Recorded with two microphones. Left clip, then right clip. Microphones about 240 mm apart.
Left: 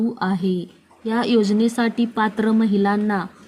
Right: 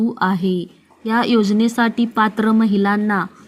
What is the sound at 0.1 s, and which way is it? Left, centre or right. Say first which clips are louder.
Speech: right 4 dB; centre.